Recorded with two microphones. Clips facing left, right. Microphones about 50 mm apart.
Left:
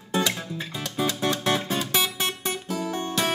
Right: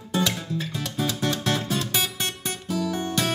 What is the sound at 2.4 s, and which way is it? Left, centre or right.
Guitar, left.